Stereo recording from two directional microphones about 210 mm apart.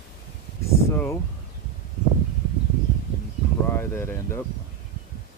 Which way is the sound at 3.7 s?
10° left (ahead or behind).